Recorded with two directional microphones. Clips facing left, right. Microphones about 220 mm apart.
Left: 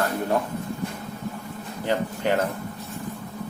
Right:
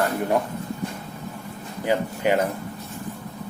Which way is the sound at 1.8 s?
10° right (ahead or behind).